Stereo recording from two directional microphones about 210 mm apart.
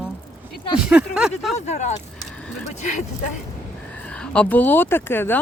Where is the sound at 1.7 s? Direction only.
35° left (ahead or behind).